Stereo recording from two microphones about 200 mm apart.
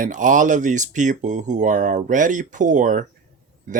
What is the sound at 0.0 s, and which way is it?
Speech, 40° right (ahead or behind).